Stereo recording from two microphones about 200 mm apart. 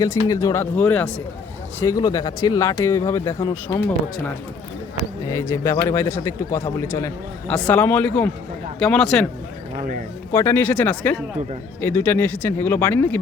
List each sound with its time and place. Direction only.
0.3 s speech: 15° left (ahead or behind)
5.3 s speech: 15° left (ahead or behind)
9.7 s a man's voice: 40° right (ahead or behind)
10.3 s speech: 10° left (ahead or behind)